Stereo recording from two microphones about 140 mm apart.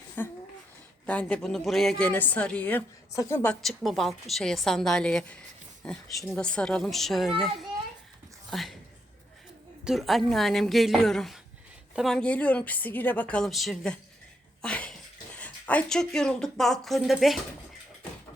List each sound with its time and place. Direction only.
0.2 s a woman's voice: 15° left (ahead or behind)
3.5 s speech: centre (ahead or behind)
9.8 s a woman's voice: centre (ahead or behind)
14.6 s a sound: 5° left (ahead or behind)
15.4 s speech: 10° left (ahead or behind)